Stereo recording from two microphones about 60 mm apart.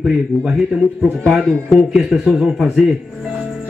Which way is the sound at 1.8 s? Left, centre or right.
Centre.